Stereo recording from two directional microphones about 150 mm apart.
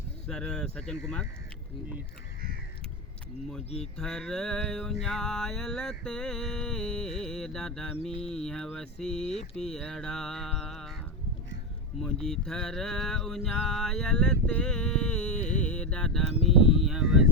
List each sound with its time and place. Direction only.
0.3 s mantra: 5° left (ahead or behind)
3.9 s mantra: 5° left (ahead or behind)
11.9 s mantra: 5° left (ahead or behind)
15.4 s music: 50° left (ahead or behind)
15.7 s mantra: 5° left (ahead or behind)
16.8 s a sound: centre (ahead or behind)